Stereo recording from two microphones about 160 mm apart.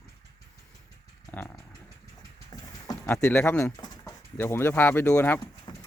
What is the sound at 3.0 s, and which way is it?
Speech, 10° left (ahead or behind).